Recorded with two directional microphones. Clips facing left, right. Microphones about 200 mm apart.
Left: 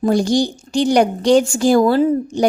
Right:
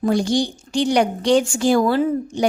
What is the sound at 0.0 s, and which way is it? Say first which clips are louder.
A woman's voice: left 3 dB; 40° left (ahead or behind).